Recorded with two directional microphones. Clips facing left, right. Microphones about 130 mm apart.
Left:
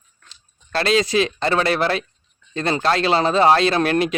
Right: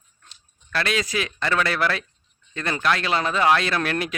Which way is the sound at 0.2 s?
90° left.